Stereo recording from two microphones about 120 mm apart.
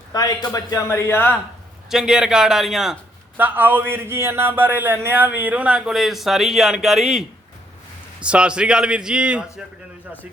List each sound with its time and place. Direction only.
0.1 s a man's voice: 30° left (ahead or behind)
1.9 s a man's voice: 5° right (ahead or behind)
3.3 s speech: 15° right (ahead or behind)